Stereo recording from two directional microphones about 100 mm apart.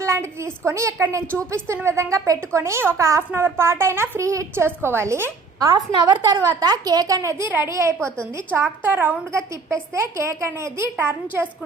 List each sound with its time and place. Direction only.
0.0 s speech: 25° right (ahead or behind)
5.5 s a woman's voice: 45° right (ahead or behind); by 11.4 s 25° right (ahead or behind)